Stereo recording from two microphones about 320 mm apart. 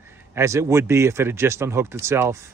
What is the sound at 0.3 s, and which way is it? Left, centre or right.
Speech, centre.